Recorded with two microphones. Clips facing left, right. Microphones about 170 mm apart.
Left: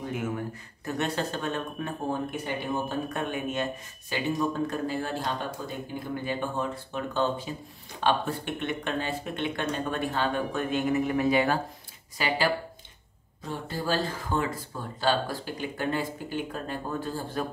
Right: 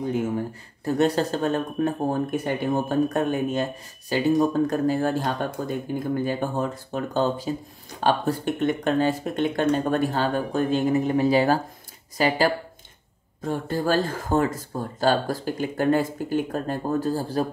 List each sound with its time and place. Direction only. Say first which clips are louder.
0.1 s speech: right 6 dB; 30° right (ahead or behind)